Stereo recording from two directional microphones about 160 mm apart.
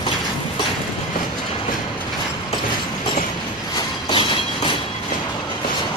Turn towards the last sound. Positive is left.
turn(degrees=30)  # may be behind; listen again after turning